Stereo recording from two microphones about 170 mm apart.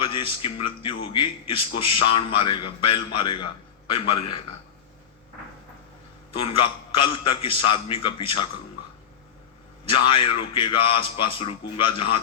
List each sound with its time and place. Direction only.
0.0 s a man's voice: 30° left (ahead or behind)
6.3 s a man's voice: 30° left (ahead or behind)
9.9 s a man's voice: 30° left (ahead or behind)